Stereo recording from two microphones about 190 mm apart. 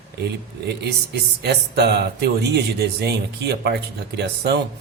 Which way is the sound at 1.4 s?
60° right (ahead or behind).